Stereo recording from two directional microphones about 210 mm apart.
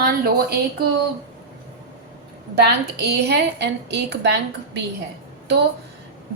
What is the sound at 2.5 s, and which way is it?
A woman's voice, 50° right (ahead or behind).